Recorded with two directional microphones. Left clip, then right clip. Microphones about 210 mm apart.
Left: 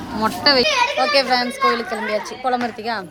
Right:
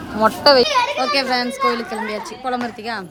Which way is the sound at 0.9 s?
10° right (ahead or behind).